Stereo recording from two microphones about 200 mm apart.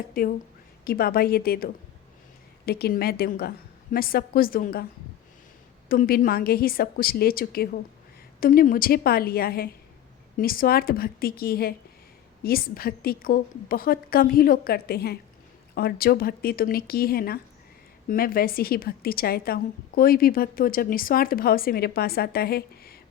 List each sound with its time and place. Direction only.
0.2 s a woman's voice: 45° left (ahead or behind)
5.9 s a woman's voice: 50° left (ahead or behind)